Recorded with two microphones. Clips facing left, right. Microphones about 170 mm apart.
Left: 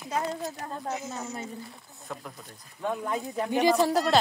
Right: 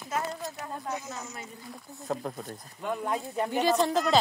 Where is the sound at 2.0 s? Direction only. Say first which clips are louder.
Right 7 dB; 45° right (ahead or behind).